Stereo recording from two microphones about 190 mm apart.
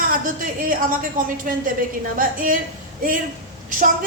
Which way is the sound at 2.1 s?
45° right (ahead or behind).